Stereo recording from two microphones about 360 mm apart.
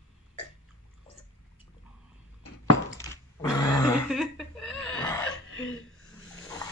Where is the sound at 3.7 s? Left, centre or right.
Centre.